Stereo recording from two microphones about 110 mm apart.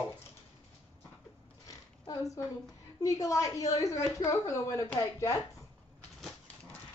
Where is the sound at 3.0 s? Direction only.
30° left (ahead or behind).